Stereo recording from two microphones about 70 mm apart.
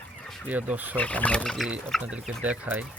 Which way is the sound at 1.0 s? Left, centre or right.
Centre.